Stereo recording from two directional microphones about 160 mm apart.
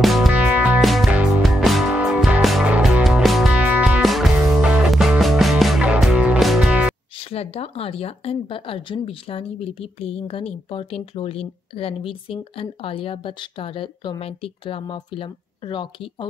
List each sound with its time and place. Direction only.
0.0 s music: centre (ahead or behind)
7.2 s speech: 40° left (ahead or behind)